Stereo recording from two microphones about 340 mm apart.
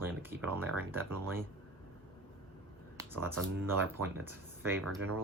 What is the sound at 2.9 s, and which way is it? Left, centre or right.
Speech, centre.